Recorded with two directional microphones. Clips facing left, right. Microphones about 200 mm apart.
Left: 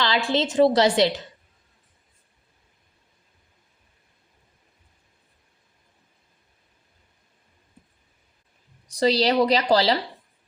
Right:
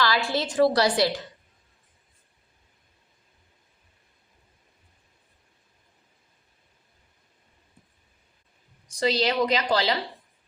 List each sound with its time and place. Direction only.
0.0 s a woman's voice: 20° left (ahead or behind)
9.0 s a woman's voice: 35° left (ahead or behind)